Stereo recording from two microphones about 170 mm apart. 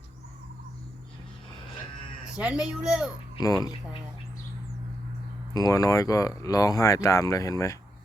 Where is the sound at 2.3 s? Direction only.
5° right (ahead or behind).